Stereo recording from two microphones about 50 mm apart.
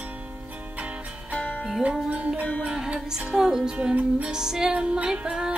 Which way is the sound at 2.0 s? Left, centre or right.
Right.